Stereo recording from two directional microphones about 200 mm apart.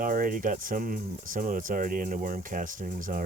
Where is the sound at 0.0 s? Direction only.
45° right (ahead or behind).